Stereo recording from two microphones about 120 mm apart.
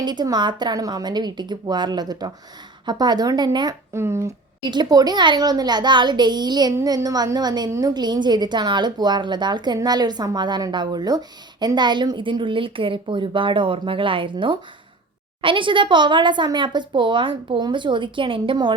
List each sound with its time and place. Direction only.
0.0 s a woman's voice: 35° right (ahead or behind)
3.9 s speech: 20° right (ahead or behind)
4.6 s a woman's voice: 40° right (ahead or behind)